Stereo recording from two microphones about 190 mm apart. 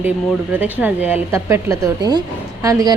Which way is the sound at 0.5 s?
10° right (ahead or behind).